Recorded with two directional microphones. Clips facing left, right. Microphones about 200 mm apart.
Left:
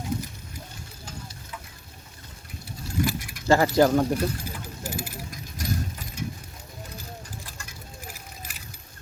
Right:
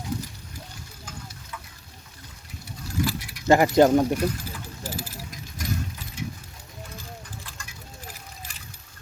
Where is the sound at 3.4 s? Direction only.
20° right (ahead or behind).